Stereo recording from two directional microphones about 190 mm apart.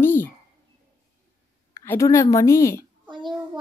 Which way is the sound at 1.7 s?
15° left (ahead or behind).